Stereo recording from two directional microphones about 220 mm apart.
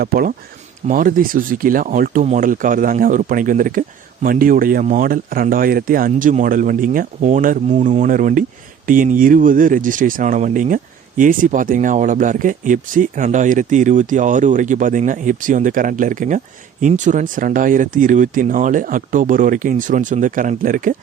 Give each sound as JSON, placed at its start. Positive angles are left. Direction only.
{"t": 0.0, "sound": "speech", "side_deg": -40}